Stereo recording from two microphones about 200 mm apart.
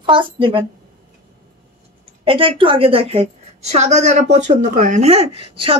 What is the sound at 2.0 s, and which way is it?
A woman's voice, 25° right (ahead or behind).